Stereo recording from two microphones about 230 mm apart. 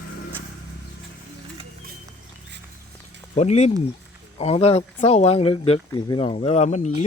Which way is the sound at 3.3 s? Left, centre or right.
Left.